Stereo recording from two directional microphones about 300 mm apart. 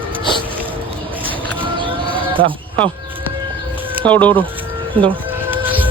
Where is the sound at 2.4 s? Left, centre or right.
Right.